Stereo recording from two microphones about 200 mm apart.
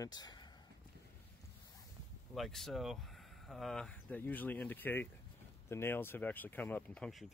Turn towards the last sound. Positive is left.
turn(degrees=5)  # may be behind; listen again after turning